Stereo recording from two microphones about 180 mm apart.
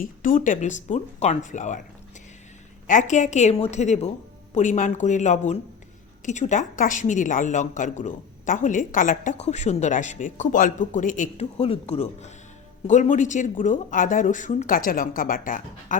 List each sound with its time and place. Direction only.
0.0 s a woman's voice: 50° left (ahead or behind)
2.8 s a woman's voice: 45° left (ahead or behind)